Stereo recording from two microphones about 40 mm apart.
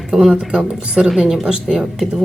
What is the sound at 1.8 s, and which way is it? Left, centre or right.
Speech, centre.